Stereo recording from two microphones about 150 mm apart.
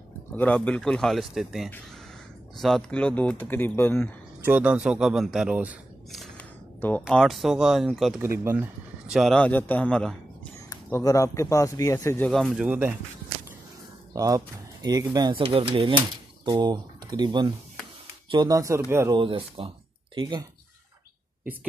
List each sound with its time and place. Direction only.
0.4 s speech: 10° left (ahead or behind)
4.4 s speech: 10° right (ahead or behind)
6.2 s a sound: 10° left (ahead or behind)
7.1 s speech: centre (ahead or behind)
8.2 s speech: 15° right (ahead or behind)
9.0 s speech: 5° right (ahead or behind)
10.7 s speech: 20° left (ahead or behind)
12.4 s speech: 10° right (ahead or behind)
14.1 s speech: 25° right (ahead or behind)
15.4 s speech: 40° right (ahead or behind)
16.4 s speech: 25° right (ahead or behind)
19.1 s speech: 35° right (ahead or behind)